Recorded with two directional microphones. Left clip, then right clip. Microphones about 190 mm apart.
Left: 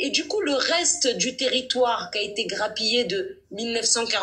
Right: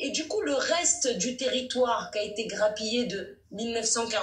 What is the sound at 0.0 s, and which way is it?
Speech, 25° left (ahead or behind).